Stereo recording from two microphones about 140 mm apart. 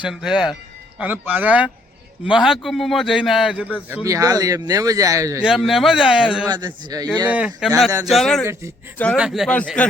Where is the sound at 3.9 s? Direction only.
20° right (ahead or behind).